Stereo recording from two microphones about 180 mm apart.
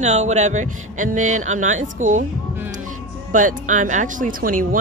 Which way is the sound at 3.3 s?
45° right (ahead or behind).